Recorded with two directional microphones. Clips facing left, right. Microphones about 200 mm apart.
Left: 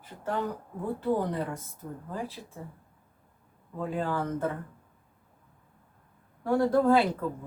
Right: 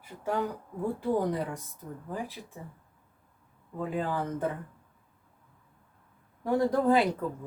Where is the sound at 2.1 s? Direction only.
15° right (ahead or behind).